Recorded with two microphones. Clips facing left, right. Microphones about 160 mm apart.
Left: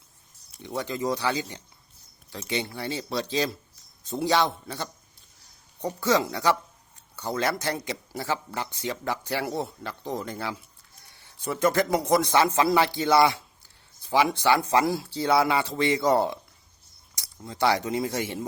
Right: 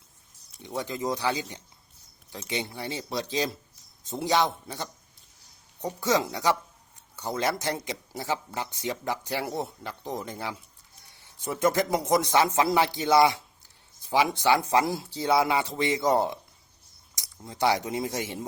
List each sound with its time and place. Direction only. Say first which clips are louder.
0.6 s speech: left 2 dB; 15° right (ahead or behind)
6.0 s speech: left 2 dB; 20° right (ahead or behind)